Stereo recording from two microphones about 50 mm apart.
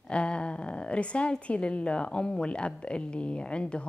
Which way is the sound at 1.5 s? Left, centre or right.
Left.